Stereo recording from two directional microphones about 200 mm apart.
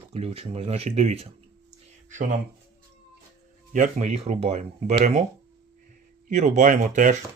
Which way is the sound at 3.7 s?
35° right (ahead or behind).